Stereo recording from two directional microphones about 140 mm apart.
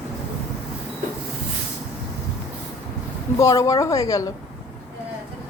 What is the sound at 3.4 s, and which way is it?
Speech, 25° left (ahead or behind).